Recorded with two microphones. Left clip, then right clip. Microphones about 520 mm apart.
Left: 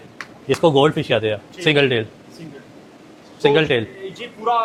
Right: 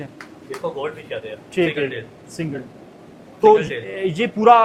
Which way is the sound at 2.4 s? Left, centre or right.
Right.